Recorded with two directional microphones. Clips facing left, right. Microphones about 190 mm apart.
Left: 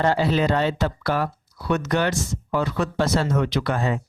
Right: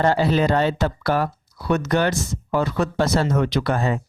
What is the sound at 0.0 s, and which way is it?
Speech, 40° right (ahead or behind).